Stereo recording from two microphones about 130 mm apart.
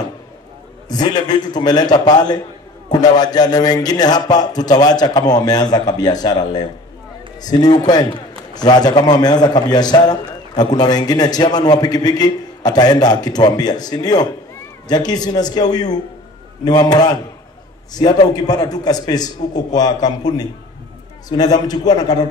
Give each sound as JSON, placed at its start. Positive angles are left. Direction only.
{"t": 0.8, "sound": "a man's voice", "side_deg": 30}